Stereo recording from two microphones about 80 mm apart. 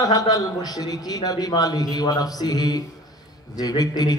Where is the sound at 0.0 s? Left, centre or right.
Left.